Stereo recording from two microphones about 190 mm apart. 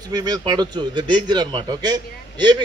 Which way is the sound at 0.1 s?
20° right (ahead or behind).